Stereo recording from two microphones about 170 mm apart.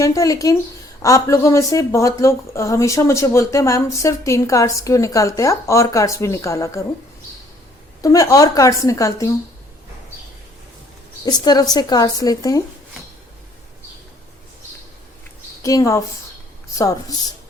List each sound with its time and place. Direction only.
0.0 s a woman's voice: 20° left (ahead or behind)
8.0 s a woman's voice: 20° left (ahead or behind)
11.3 s a woman's voice: 25° left (ahead or behind)
15.6 s a woman's voice: 20° left (ahead or behind)